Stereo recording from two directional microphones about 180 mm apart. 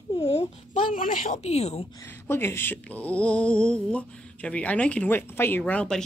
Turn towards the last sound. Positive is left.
turn(degrees=5)  # may be behind; listen again after turning